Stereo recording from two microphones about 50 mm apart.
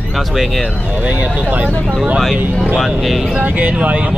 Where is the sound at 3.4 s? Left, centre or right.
Right.